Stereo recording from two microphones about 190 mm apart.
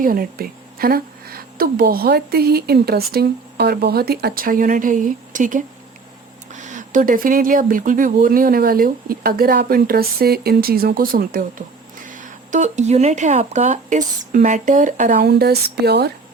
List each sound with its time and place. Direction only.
0.0 s a woman's voice: 50° right (ahead or behind)